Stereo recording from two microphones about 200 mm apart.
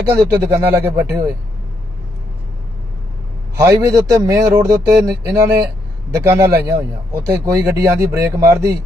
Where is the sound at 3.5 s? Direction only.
15° right (ahead or behind).